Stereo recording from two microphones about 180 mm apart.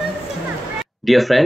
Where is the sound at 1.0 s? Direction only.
Centre (ahead or behind).